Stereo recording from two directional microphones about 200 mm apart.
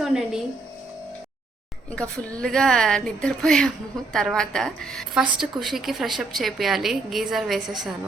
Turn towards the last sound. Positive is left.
turn(degrees=0)  # may be behind; listen again after turning